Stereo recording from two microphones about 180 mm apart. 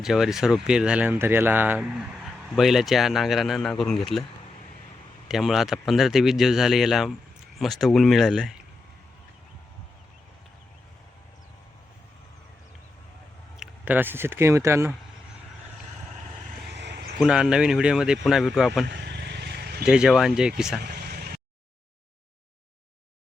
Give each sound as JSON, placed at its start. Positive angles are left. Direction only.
{"t": 0.0, "sound": "speech", "side_deg": 0}
{"t": 5.3, "sound": "speech", "side_deg": 0}
{"t": 13.6, "sound": "speech", "side_deg": -10}
{"t": 16.6, "sound": "vehicle", "side_deg": -70}
{"t": 17.2, "sound": "speech", "side_deg": -5}
{"t": 18.9, "sound": "vehicle", "side_deg": -70}
{"t": 19.8, "sound": "speech", "side_deg": -5}
{"t": 20.8, "sound": "a sound", "side_deg": -65}